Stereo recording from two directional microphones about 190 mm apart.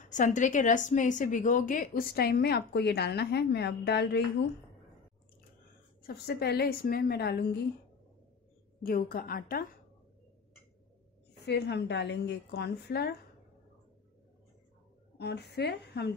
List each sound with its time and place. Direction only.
0.0 s a woman's voice: 40° left (ahead or behind); by 4.2 s 60° left (ahead or behind)
6.0 s a woman's voice: 60° left (ahead or behind)
8.8 s a woman's voice: 50° left (ahead or behind)
11.4 s a woman's voice: 65° left (ahead or behind)
15.1 s a woman's voice: 60° left (ahead or behind)